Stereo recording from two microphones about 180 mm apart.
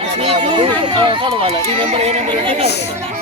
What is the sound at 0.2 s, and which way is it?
Speech, 30° right (ahead or behind).